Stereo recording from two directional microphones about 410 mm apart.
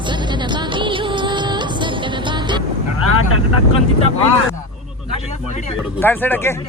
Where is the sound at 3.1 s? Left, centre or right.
Left.